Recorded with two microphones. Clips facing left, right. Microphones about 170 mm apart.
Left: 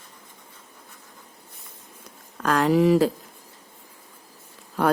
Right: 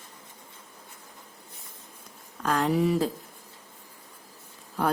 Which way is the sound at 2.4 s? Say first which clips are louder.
Left 5 dB; 80° left.